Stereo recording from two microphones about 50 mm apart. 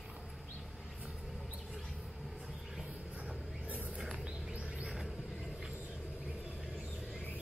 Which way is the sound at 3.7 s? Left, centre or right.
Right.